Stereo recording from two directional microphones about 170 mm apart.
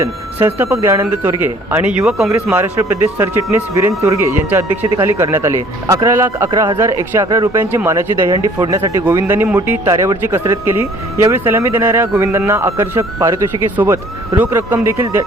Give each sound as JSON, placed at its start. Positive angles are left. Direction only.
{"t": 0.0, "sound": "speech", "side_deg": -15}
{"t": 2.5, "sound": "speech", "side_deg": -15}
{"t": 6.5, "sound": "speech", "side_deg": -25}